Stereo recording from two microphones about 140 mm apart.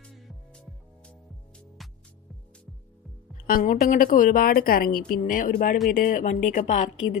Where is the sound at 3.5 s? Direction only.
85° left.